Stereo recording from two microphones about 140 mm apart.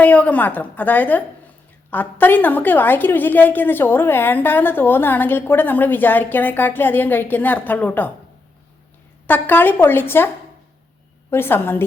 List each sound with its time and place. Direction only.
0.0 s a woman's voice: 10° left (ahead or behind)
9.2 s a woman's voice: 15° left (ahead or behind)
11.3 s a woman's voice: 15° left (ahead or behind)